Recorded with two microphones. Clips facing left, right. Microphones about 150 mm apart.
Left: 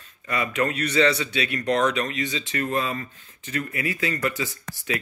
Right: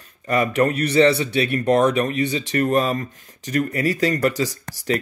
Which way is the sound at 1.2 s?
55° right (ahead or behind).